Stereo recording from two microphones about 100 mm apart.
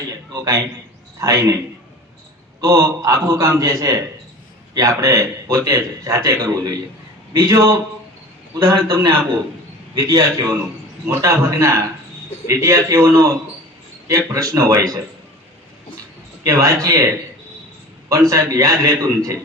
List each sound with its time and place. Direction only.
1.2 s a man's voice: 35° right (ahead or behind)
2.6 s a man's voice: 30° right (ahead or behind)
16.4 s a man's voice: 35° right (ahead or behind)
18.1 s a man's voice: 35° right (ahead or behind)